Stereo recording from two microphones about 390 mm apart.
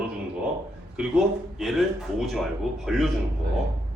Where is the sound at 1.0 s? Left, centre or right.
Centre.